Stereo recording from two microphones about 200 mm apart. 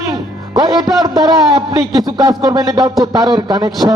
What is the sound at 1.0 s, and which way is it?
A man's voice, 20° right (ahead or behind).